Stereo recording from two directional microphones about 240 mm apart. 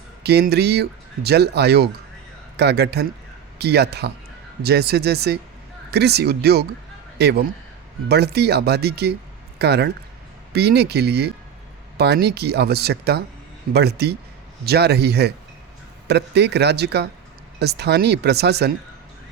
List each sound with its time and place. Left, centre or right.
0.2 s speech: right